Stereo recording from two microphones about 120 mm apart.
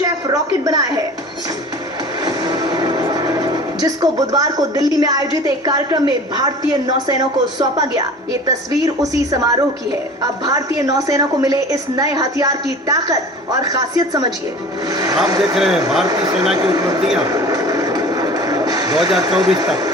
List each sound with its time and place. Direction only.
0.0 s a woman's voice: 30° right (ahead or behind)
2.2 s a woman's voice: 35° right (ahead or behind)
15.5 s speech: centre (ahead or behind)
16.0 s a woman's voice: 30° right (ahead or behind)
17.2 s vehicle: 30° right (ahead or behind)
19.2 s a woman's voice: 30° right (ahead or behind)